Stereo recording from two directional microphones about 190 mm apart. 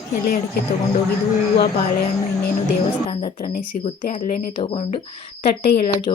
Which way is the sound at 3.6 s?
40° left (ahead or behind).